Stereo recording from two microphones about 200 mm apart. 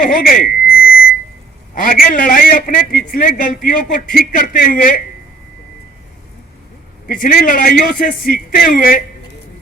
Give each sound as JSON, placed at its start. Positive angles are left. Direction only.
{"t": 0.0, "sound": "a sound", "side_deg": 45}
{"t": 1.7, "sound": "a man's voice", "side_deg": 45}
{"t": 7.1, "sound": "a man's voice", "side_deg": 45}